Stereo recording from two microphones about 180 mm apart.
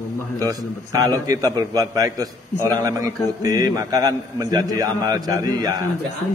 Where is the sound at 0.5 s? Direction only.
20° right (ahead or behind).